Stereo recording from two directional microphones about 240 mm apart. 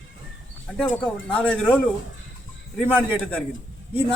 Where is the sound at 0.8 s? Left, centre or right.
Centre.